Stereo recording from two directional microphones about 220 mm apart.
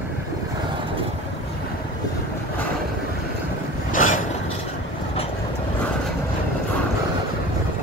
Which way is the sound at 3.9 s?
35° left (ahead or behind).